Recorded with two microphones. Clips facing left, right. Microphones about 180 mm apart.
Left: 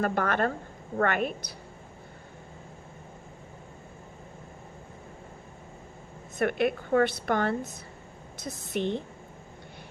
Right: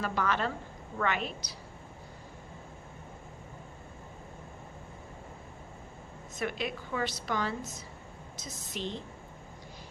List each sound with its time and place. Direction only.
0.0 s a woman's voice: 55° left (ahead or behind)
6.4 s a woman's voice: 55° left (ahead or behind)